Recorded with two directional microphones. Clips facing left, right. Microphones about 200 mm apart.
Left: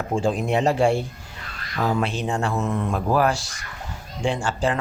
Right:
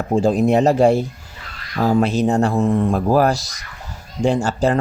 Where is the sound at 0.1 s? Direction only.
40° right (ahead or behind).